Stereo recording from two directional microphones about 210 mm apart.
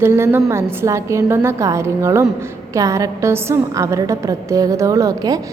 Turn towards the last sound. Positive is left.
turn(degrees=-15)  # may be behind; listen again after turning